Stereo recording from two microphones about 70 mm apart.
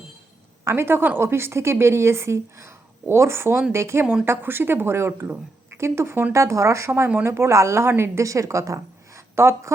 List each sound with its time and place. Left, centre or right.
0.6 s a woman's voice: right